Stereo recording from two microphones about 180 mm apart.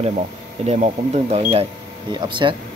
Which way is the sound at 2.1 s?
25° right (ahead or behind).